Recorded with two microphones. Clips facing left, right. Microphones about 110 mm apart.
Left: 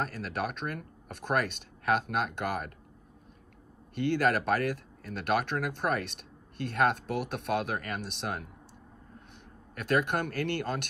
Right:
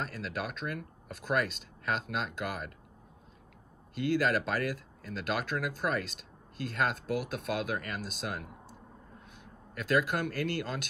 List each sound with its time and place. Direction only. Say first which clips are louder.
0.0 s speech: left 3 dB; 50° left (ahead or behind)
3.9 s speech: left 2 dB; 50° left (ahead or behind)
9.8 s speech: left 1 dB; 50° left (ahead or behind)